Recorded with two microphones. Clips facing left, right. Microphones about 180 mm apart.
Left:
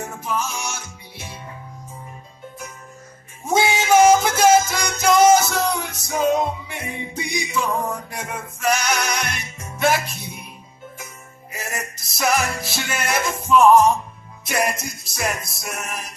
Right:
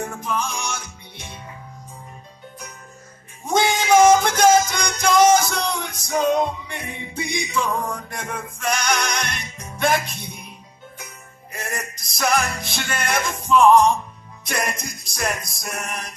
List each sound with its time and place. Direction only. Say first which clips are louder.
0.0 s music: even; 5° left (ahead or behind)
3.4 s music: even; 5° left (ahead or behind)
11.5 s music: even; 5° left (ahead or behind)